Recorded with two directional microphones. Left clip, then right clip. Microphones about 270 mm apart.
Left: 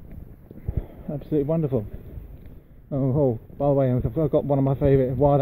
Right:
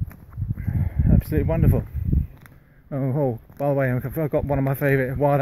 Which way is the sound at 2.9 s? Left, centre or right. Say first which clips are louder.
Left 2 dB; centre.